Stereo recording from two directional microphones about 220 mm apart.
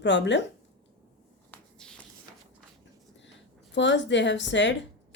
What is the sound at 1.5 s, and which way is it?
Walk, 5° left (ahead or behind).